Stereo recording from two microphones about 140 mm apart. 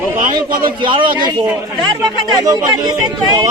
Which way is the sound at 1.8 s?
25° right (ahead or behind).